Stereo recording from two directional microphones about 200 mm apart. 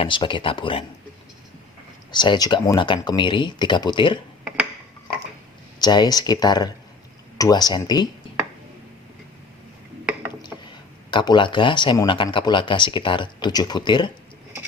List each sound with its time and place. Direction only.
0.0 s speech: 25° left (ahead or behind)
2.1 s speech: 20° left (ahead or behind)
5.8 s speech: 20° left (ahead or behind)
11.1 s speech: 25° left (ahead or behind)